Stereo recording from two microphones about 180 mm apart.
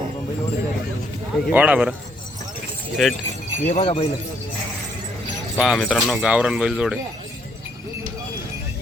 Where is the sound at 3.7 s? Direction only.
35° left (ahead or behind).